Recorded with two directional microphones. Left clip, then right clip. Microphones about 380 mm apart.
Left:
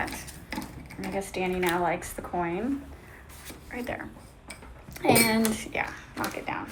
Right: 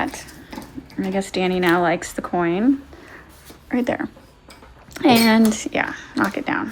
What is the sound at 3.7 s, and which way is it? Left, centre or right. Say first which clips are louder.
A woman's voice: right 12 dB; centre.